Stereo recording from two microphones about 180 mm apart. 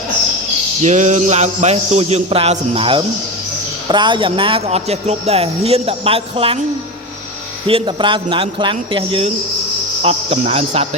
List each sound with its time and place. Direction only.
0.8 s speech: 40° right (ahead or behind)
7.7 s speech: 30° right (ahead or behind)